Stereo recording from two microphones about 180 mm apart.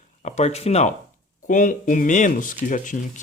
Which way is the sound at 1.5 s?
45° left (ahead or behind).